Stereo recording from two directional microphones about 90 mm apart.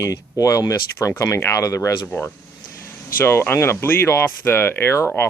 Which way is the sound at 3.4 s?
25° left (ahead or behind).